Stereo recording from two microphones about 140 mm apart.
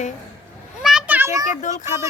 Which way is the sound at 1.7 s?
65° left (ahead or behind).